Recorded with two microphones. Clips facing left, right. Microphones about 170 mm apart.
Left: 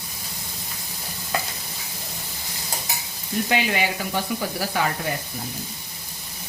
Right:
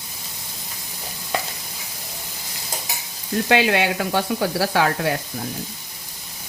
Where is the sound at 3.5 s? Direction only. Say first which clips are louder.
Right 6 dB; 80° right.